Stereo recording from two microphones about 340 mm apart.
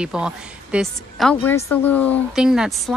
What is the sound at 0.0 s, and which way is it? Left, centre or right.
A woman's voice, centre.